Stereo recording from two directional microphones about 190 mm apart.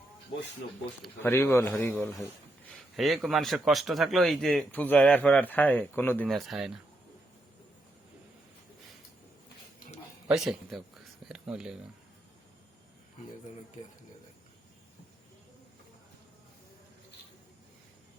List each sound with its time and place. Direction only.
1.2 s a man's voice: 10° left (ahead or behind)
2.6 s a man's voice: centre (ahead or behind)
10.2 s speech: 5° right (ahead or behind)